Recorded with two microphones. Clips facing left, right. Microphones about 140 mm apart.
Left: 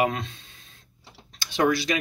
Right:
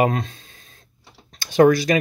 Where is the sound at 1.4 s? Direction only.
45° right (ahead or behind).